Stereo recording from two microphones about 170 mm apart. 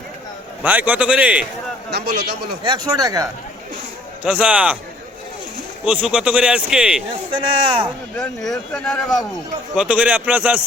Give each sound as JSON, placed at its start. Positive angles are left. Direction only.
{"t": 0.6, "sound": "a man's voice", "side_deg": -10}
{"t": 1.9, "sound": "a man's voice", "side_deg": -70}
{"t": 2.6, "sound": "speech", "side_deg": -25}
{"t": 4.2, "sound": "a man's voice", "side_deg": -5}
{"t": 5.8, "sound": "speech", "side_deg": -5}
{"t": 7.3, "sound": "speech", "side_deg": -30}
{"t": 8.1, "sound": "speech", "side_deg": 5}
{"t": 9.7, "sound": "a man's voice", "side_deg": -5}